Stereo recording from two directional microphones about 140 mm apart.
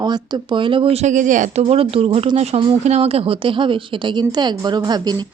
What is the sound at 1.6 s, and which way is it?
Speech, 40° right (ahead or behind).